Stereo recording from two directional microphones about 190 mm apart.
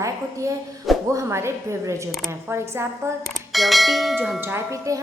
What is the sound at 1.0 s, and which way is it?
A woman's voice, 15° right (ahead or behind).